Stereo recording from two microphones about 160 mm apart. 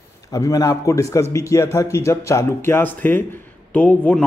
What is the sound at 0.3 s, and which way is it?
A man's voice, 20° left (ahead or behind).